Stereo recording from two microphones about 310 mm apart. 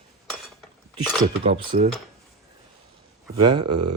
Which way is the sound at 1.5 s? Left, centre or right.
Centre.